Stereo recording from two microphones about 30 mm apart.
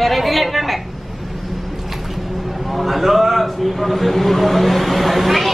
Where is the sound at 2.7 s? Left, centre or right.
Centre.